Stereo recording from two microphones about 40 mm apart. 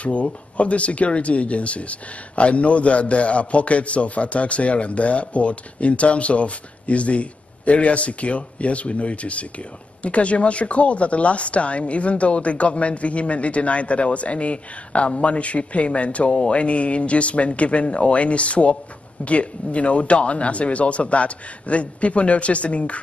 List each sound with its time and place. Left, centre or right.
0.0 s speech: left